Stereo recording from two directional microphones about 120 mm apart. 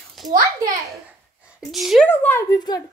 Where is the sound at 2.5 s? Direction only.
35° left (ahead or behind).